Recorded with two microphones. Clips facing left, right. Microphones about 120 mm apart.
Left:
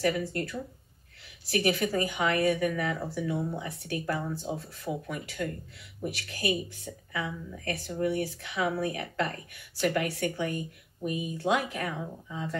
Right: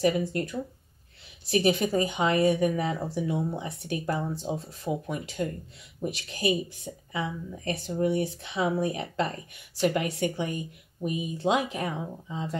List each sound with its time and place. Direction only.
0.0 s speech: 20° right (ahead or behind)